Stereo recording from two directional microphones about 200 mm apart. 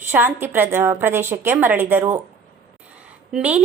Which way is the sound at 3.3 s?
5° right (ahead or behind).